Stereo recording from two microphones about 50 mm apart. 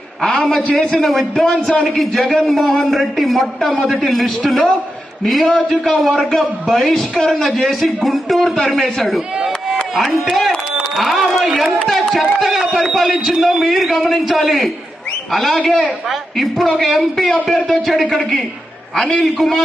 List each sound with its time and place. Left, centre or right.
0.2 s a man's voice: centre
0.9 s a man's voice: centre
1.5 s a man's voice: centre
11.9 s a sound: centre
12.4 s a man's voice: centre